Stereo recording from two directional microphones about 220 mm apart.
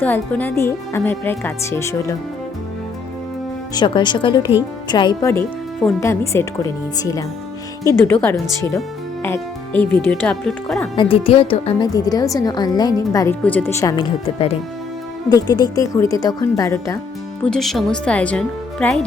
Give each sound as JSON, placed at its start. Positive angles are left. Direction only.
{"t": 0.0, "sound": "a woman's voice", "side_deg": 5}
{"t": 3.8, "sound": "a woman's voice", "side_deg": 20}
{"t": 10.9, "sound": "a woman's voice", "side_deg": 25}
{"t": 17.4, "sound": "speech", "side_deg": 0}